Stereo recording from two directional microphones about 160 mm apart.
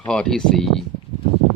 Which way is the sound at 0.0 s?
5° left (ahead or behind).